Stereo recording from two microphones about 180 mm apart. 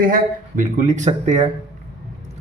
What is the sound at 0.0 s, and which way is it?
Speech, 50° right (ahead or behind).